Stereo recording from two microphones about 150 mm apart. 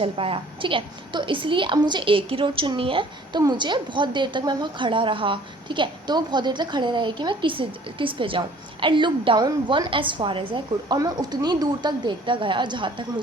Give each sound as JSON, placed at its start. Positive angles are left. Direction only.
{"t": 0.0, "sound": "a woman's voice", "side_deg": -40}